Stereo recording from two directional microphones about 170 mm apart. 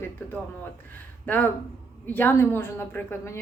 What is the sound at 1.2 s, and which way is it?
A woman's voice, 10° left (ahead or behind).